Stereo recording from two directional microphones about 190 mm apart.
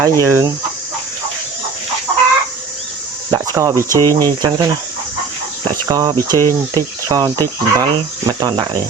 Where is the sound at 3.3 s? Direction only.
20° right (ahead or behind).